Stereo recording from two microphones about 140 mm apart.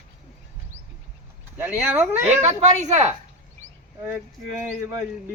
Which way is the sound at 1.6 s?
10° right (ahead or behind).